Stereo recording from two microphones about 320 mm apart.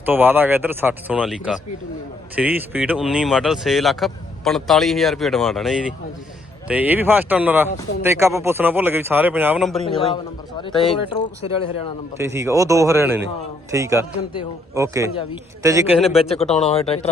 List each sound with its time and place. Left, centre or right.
0.0 s speech: centre
9.8 s speech: centre
12.1 s a man's voice: centre
16.6 s speech: centre